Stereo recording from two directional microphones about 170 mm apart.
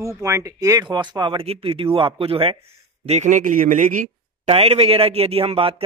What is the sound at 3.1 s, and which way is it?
A man's voice, 45° right (ahead or behind).